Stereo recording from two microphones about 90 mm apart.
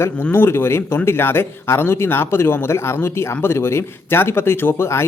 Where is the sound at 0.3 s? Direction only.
25° left (ahead or behind).